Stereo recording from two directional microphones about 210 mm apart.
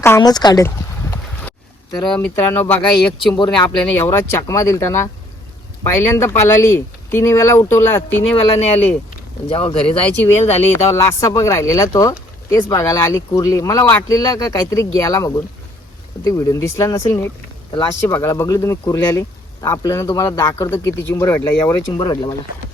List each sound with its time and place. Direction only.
0.0 s speech: 15° left (ahead or behind)
2.0 s speech: 5° left (ahead or behind)
3.3 s speech: 20° left (ahead or behind)
8.4 s speech: 30° left (ahead or behind)
10.9 s speech: 15° left (ahead or behind)
17.1 s a sound: 10° left (ahead or behind)
18.0 s speech: 15° left (ahead or behind)